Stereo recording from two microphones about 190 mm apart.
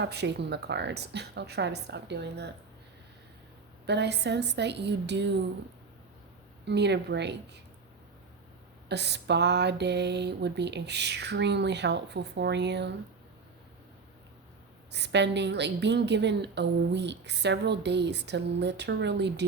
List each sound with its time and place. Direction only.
0.0 s a woman's voice: 65° right (ahead or behind)
3.8 s a woman's voice: 65° right (ahead or behind)
6.7 s a woman's voice: 65° right (ahead or behind)
8.9 s a woman's voice: 60° right (ahead or behind)
14.9 s a woman's voice: 65° right (ahead or behind)